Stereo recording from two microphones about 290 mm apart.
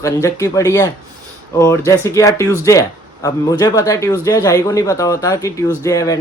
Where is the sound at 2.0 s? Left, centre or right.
Centre.